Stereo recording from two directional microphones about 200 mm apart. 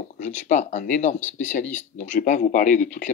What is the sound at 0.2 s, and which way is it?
Speech, 40° left (ahead or behind).